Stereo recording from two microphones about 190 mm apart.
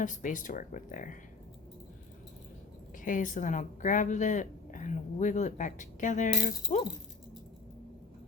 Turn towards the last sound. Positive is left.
turn(degrees=40)  # may be behind; listen again after turning